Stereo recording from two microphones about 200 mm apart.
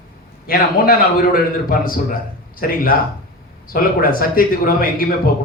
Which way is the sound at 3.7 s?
45° left (ahead or behind).